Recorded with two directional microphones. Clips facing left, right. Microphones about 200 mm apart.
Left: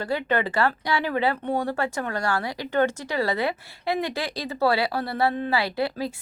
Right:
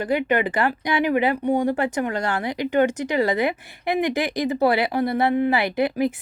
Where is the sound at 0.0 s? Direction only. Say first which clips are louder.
Right 4 dB; 15° right (ahead or behind).